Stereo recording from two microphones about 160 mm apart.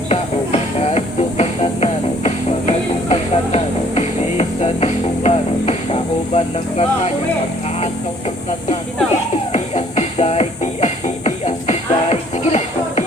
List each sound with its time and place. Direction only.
0.1 s music: 40° left (ahead or behind)
9.5 s music: 40° left (ahead or behind)